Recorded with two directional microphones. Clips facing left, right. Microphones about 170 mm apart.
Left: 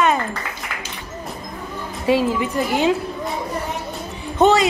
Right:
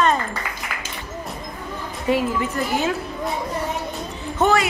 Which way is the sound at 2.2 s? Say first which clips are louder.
Left 3 dB; 20° left (ahead or behind).